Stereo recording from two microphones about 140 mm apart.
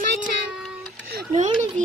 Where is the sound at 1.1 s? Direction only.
90° right.